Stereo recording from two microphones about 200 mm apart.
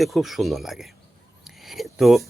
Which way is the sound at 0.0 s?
Centre (ahead or behind).